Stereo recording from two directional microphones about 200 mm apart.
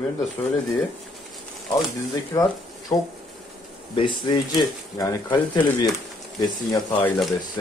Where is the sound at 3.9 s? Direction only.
25° left (ahead or behind).